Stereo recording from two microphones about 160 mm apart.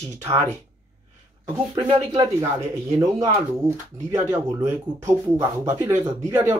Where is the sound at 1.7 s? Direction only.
30° right (ahead or behind).